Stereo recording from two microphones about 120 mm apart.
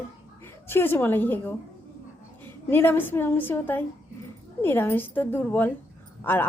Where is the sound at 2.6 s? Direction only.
20° left (ahead or behind).